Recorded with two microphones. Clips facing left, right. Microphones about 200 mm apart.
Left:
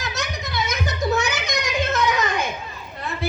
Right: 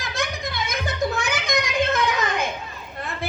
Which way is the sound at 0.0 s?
55° right (ahead or behind).